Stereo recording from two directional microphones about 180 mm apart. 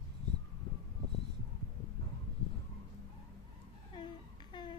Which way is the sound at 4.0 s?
25° left (ahead or behind).